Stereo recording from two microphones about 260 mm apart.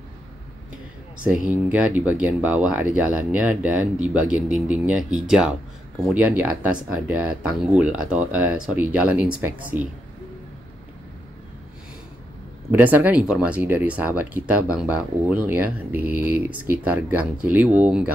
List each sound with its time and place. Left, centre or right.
1.2 s speech: centre
12.7 s speech: centre